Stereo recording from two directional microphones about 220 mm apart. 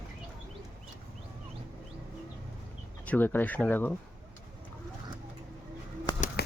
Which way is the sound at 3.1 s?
10° left (ahead or behind).